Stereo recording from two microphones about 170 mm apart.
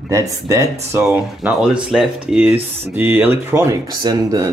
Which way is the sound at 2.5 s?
35° right (ahead or behind).